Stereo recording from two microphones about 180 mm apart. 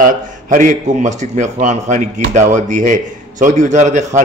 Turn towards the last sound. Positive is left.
turn(degrees=-40)  # may be behind; listen again after turning